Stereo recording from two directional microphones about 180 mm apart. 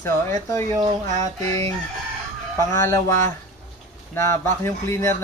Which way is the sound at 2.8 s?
15° left (ahead or behind).